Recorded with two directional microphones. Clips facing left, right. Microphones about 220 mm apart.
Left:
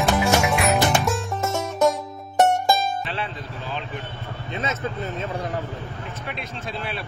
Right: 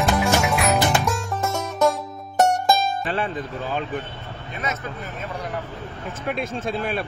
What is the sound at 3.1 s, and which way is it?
Music, 50° right (ahead or behind).